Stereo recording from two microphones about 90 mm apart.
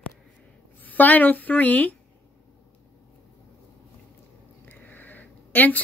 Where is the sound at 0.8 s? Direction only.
20° left (ahead or behind).